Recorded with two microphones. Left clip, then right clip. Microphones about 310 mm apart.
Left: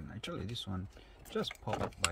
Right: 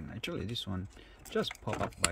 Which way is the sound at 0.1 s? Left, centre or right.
Centre.